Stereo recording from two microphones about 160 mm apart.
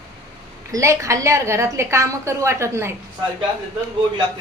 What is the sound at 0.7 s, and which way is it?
A woman's voice, 20° right (ahead or behind).